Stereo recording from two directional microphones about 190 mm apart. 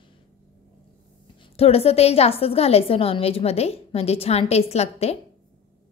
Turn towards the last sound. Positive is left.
turn(degrees=35)  # may be behind; listen again after turning